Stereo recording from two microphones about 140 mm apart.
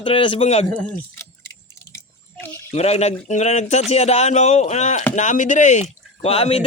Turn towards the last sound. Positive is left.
turn(degrees=45)  # may be behind; listen again after turning